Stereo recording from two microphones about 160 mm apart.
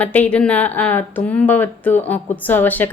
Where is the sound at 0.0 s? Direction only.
10° left (ahead or behind).